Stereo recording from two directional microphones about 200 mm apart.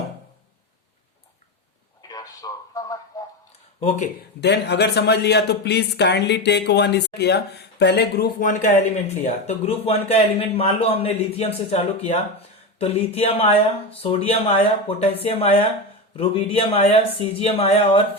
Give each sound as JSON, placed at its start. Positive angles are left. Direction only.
{"t": 2.0, "sound": "a sound", "side_deg": 20}
{"t": 3.8, "sound": "speech", "side_deg": 35}
{"t": 4.4, "sound": "speech", "side_deg": 60}